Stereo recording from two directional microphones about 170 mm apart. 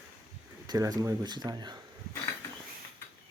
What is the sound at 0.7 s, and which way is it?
Speech, 20° right (ahead or behind).